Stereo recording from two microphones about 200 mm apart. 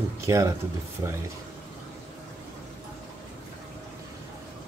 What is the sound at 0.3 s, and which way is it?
Speech, 15° right (ahead or behind).